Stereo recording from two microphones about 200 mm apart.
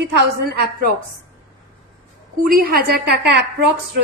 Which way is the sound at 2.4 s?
45° right (ahead or behind).